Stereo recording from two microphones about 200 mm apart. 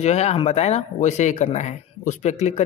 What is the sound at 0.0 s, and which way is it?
Speech, 35° left (ahead or behind).